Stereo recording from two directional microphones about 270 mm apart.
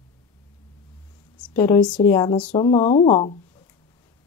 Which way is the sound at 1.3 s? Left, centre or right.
Centre.